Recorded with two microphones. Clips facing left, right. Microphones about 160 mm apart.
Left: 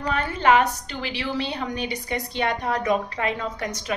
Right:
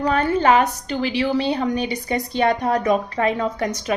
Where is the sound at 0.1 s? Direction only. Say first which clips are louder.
Right 2 dB; 40° right (ahead or behind).